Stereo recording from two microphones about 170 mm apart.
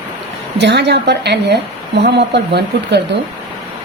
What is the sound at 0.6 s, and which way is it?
A woman's voice, 90° right.